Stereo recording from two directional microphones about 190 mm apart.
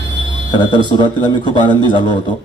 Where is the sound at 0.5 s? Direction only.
25° left (ahead or behind).